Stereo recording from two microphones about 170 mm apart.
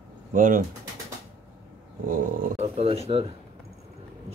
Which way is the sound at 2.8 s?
35° right (ahead or behind).